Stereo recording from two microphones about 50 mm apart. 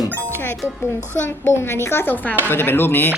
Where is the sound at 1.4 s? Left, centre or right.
Left.